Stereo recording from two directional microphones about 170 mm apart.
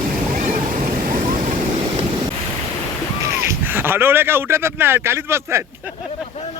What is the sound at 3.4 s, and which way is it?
Speech, 10° right (ahead or behind).